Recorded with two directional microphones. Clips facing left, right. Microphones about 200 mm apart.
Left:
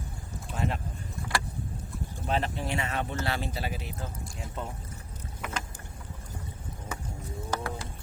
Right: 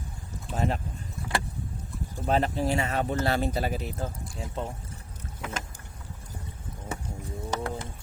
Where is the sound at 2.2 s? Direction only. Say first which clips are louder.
Right 5 dB; 40° right (ahead or behind).